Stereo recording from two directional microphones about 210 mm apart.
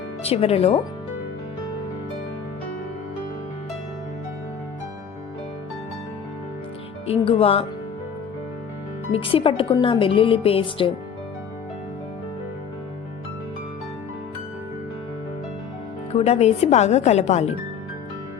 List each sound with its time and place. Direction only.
0.3 s a woman's voice: 30° left (ahead or behind)
7.1 s a woman's voice: 25° left (ahead or behind)
9.1 s a woman's voice: 25° left (ahead or behind)
16.1 s speech: 30° left (ahead or behind)